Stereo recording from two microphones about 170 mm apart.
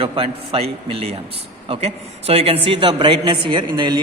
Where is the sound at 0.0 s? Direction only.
35° right (ahead or behind).